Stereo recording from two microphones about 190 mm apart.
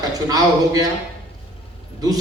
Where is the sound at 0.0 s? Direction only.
20° right (ahead or behind).